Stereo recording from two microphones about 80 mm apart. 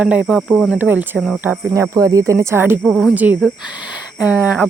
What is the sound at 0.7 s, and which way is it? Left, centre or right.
Speech, right.